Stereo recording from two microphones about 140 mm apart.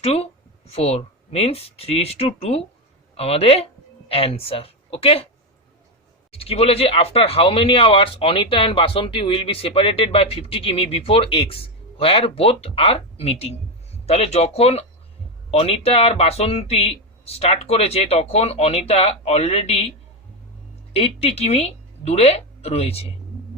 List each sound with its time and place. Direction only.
0.0 s speech: 45° left (ahead or behind)
6.3 s speech: 45° left (ahead or behind)
20.9 s a woman's voice: 45° left (ahead or behind)